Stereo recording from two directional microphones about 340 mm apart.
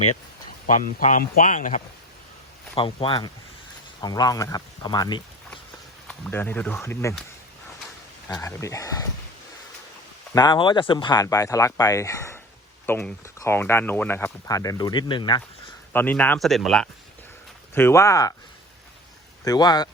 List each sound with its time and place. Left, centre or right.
0.9 s speech: left; by 7.3 s centre
8.3 s speech: centre
10.3 s speech: centre
19.5 s speech: centre